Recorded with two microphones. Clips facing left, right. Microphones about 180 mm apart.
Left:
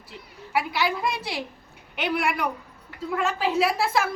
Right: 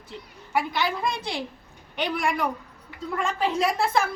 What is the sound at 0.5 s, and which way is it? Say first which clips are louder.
A woman's voice: even; 5° left (ahead or behind).